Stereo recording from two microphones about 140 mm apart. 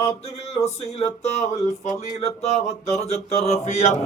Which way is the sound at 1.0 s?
50° left (ahead or behind).